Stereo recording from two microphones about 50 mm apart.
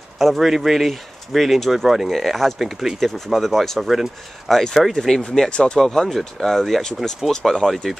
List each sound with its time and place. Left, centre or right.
0.2 s speech: centre